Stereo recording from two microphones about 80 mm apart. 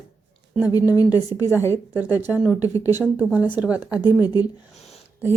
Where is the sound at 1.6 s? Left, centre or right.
Left.